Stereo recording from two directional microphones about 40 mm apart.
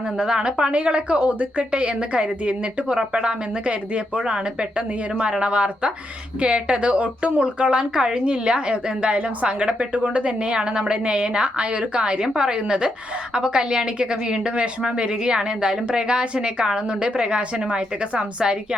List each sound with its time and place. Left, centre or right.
0.3 s a woman's voice: right
5.2 s speech: right